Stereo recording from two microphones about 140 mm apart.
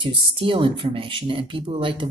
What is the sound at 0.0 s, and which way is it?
Speech, 40° right (ahead or behind).